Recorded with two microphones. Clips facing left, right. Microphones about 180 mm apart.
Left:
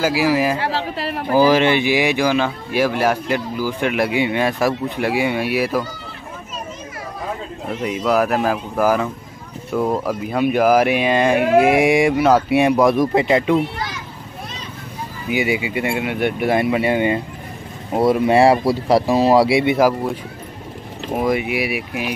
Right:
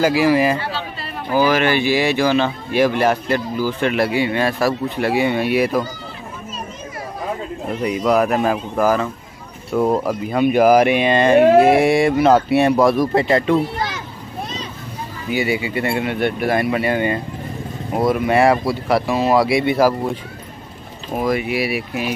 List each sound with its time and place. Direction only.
0.0 s speech: 5° left (ahead or behind)
0.6 s chatter: 90° left
1.3 s speech: 30° left (ahead or behind); by 5.9 s 5° left (ahead or behind)
7.6 s speech: centre (ahead or behind)
15.2 s speech: 15° left (ahead or behind)
21.1 s speech: 20° left (ahead or behind)